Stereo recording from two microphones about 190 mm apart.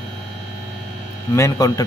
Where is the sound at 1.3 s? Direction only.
15° left (ahead or behind).